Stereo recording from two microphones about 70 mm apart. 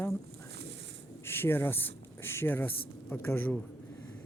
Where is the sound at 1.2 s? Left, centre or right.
Left.